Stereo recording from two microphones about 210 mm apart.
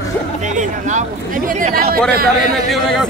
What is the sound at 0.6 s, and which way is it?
Speech, 35° right (ahead or behind).